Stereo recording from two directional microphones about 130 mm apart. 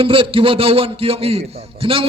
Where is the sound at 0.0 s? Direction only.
45° right (ahead or behind).